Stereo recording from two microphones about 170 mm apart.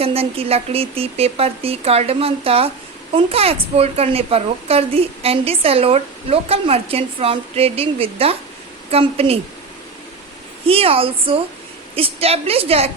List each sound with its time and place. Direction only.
0.0 s a woman's voice: 35° right (ahead or behind)
10.7 s a woman's voice: 35° right (ahead or behind)